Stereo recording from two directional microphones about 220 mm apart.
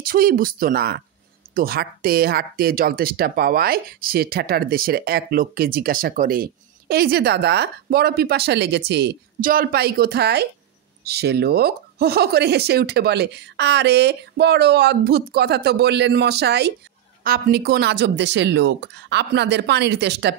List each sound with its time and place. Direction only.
0.0 s speech: 40° right (ahead or behind)